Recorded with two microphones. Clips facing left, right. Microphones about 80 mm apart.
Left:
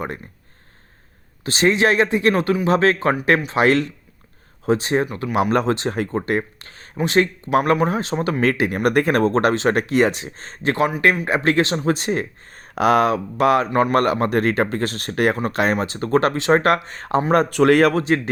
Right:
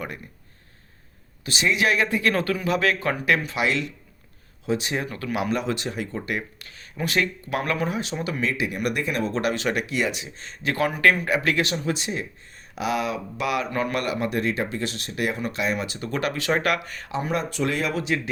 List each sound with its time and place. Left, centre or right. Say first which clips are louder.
1.5 s speech: left 6 dB; left
5.5 s speech: left 7 dB; left
7.9 s speech: left 6 dB; left
17.3 s speech: left 12 dB; left
17.9 s speech: left 7 dB; left